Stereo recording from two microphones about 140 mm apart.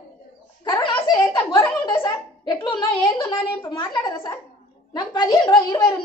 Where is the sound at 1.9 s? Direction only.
35° left (ahead or behind).